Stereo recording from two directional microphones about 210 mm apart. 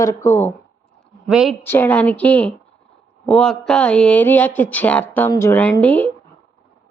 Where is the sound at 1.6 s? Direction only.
10° left (ahead or behind).